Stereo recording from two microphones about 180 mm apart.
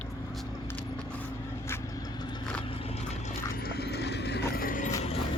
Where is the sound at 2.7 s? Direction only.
30° left (ahead or behind).